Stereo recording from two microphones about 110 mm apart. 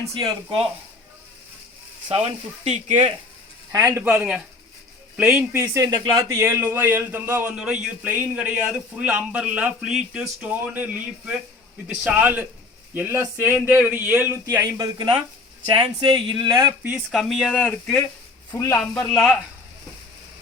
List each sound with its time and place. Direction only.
0.2 s speech: 45° right (ahead or behind)
2.0 s speech: 70° right (ahead or behind)
3.7 s a man's voice: 25° right (ahead or behind)
4.1 s a man's voice: 10° right (ahead or behind)
5.5 s a man's voice: 30° right (ahead or behind)
14.4 s speech: 30° right (ahead or behind)
14.9 s speech: 50° right (ahead or behind)
16.6 s a man's voice: 25° right (ahead or behind)
16.9 s speech: centre (ahead or behind)
18.5 s speech: 25° left (ahead or behind)
18.8 s speech: 5° left (ahead or behind)